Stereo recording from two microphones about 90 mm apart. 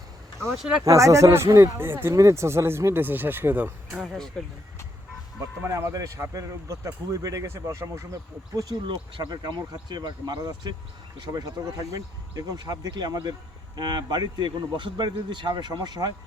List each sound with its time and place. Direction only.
0.5 s speech: 5° right (ahead or behind)
0.9 s speech: 35° right (ahead or behind); by 4.0 s 20° right (ahead or behind)
4.0 s speech: centre (ahead or behind)
5.4 s speech: 35° right (ahead or behind)
8.9 s speech: 55° right (ahead or behind)